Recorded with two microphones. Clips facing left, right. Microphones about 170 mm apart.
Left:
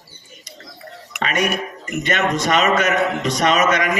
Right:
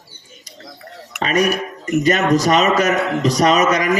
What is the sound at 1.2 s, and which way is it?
A man's voice, 35° right (ahead or behind).